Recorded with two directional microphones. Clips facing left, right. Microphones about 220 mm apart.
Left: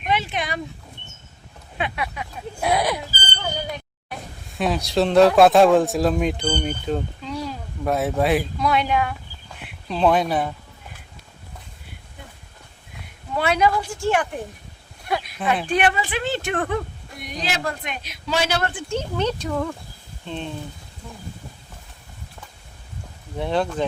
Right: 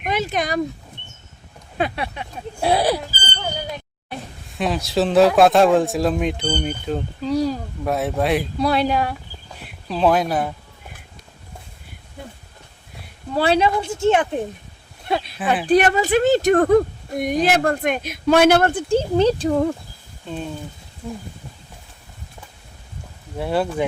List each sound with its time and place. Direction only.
0.0 s speech: 40° right (ahead or behind)
1.8 s speech: 30° right (ahead or behind)
4.5 s speech: centre (ahead or behind)
7.2 s a sound: 35° right (ahead or behind)
7.9 s speech: centre (ahead or behind)
8.5 s speech: 35° right (ahead or behind)
9.9 s speech: centre (ahead or behind)
13.3 s speech: 30° right (ahead or behind)
15.6 s speech: 40° right (ahead or behind)
20.2 s speech: 5° right (ahead or behind)
23.4 s speech: 5° right (ahead or behind)